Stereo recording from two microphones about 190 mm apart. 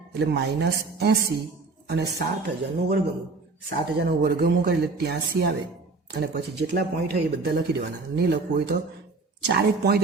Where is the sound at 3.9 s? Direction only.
55° right (ahead or behind).